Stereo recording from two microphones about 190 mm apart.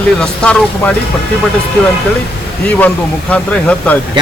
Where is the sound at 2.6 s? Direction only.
5° left (ahead or behind).